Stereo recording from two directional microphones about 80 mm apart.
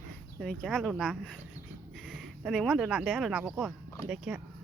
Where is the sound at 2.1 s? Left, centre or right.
Centre.